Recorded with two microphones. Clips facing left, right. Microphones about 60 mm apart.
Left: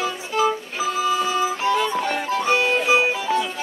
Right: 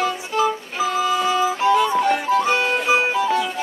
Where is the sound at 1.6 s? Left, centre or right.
Centre.